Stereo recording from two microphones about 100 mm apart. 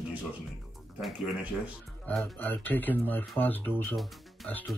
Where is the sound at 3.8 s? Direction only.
Centre (ahead or behind).